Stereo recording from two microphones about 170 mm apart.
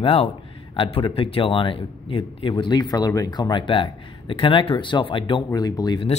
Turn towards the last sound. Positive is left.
turn(degrees=25)  # may be behind; listen again after turning